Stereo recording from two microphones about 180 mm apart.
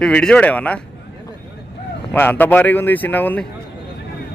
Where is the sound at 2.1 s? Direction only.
10° left (ahead or behind).